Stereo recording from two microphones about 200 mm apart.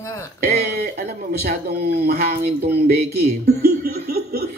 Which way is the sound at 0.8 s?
45° right (ahead or behind).